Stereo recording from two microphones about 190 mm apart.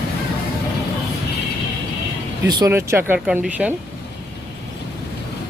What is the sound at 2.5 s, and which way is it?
Speech, 20° right (ahead or behind).